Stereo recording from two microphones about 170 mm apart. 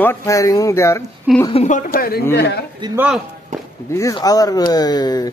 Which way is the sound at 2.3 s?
80° left.